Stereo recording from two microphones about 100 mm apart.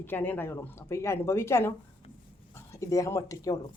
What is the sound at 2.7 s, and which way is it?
Speech, 35° left (ahead or behind).